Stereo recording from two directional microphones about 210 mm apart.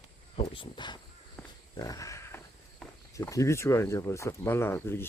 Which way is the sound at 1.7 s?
15° left (ahead or behind).